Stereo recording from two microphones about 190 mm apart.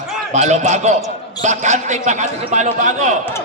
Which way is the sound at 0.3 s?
40° right (ahead or behind).